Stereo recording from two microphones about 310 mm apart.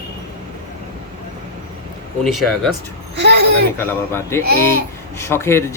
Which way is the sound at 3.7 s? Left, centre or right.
Centre.